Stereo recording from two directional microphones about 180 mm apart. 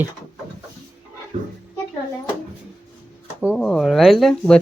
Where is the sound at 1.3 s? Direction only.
35° right (ahead or behind).